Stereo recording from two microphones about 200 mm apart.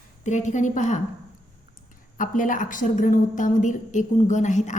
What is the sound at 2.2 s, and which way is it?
A woman's voice, 40° left (ahead or behind).